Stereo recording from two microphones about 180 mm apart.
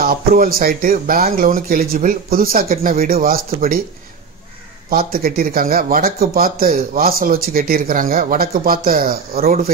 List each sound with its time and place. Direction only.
0.0 s speech: 55° right (ahead or behind)
4.8 s speech: 55° right (ahead or behind)